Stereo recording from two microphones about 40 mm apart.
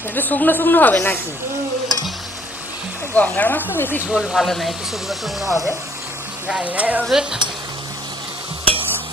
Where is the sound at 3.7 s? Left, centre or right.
Left.